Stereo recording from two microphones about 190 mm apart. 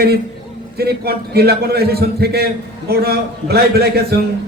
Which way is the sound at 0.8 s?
55° right (ahead or behind).